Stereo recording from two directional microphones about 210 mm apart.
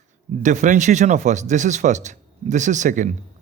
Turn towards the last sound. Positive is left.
turn(degrees=-35)  # may be behind; listen again after turning